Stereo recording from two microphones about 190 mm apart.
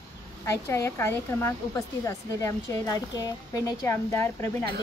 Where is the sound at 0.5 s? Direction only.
15° left (ahead or behind).